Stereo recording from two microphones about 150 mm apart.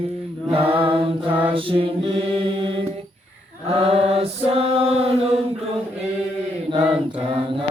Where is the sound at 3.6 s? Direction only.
40° right (ahead or behind).